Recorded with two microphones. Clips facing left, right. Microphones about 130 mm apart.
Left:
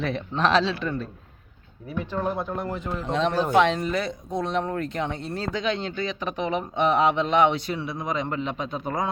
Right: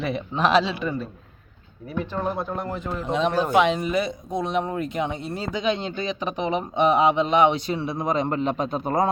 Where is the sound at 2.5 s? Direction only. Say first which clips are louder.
Right 1 dB; 15° right (ahead or behind).